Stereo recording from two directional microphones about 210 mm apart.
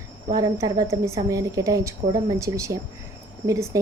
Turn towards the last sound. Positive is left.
turn(degrees=-15)  # may be behind; listen again after turning